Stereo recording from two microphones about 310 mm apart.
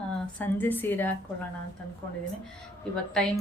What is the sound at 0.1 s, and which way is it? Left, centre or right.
A woman's voice, centre.